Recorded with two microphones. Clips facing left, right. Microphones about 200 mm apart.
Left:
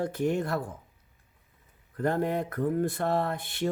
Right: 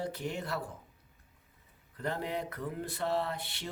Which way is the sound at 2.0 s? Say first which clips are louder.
Left 8 dB; 50° left (ahead or behind).